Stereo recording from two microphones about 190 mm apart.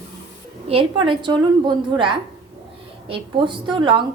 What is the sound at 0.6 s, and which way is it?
A woman's voice, 30° right (ahead or behind).